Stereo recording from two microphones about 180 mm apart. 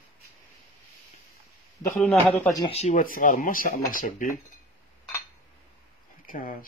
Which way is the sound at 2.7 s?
40° left (ahead or behind).